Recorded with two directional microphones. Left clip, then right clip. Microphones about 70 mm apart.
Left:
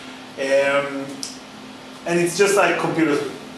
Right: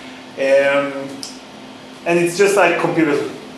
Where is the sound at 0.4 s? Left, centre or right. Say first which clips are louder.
Right 5 dB; right.